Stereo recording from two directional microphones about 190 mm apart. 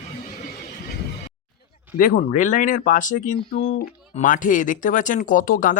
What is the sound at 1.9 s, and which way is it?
Speech, 45° left (ahead or behind).